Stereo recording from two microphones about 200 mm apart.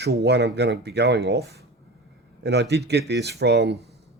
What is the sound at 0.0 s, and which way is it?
Speech, 55° right (ahead or behind).